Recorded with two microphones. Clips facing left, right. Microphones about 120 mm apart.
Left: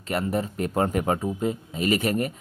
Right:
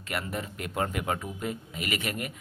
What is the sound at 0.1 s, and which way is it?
Speech, 35° left (ahead or behind).